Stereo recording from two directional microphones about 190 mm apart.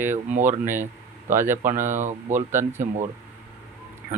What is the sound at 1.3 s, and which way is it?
Speech, 10° right (ahead or behind).